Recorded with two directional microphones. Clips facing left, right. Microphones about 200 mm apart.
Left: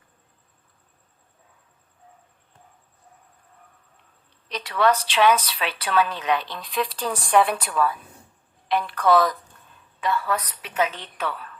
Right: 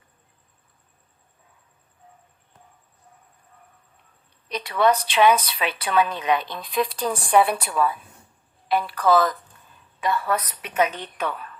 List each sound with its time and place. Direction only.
4.7 s a woman's voice: 10° right (ahead or behind)
10.0 s a woman's voice: 15° right (ahead or behind)